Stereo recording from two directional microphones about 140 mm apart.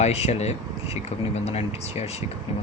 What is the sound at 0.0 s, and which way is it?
Speech, 50° left (ahead or behind).